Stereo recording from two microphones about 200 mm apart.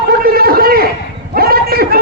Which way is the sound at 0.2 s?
50° right (ahead or behind).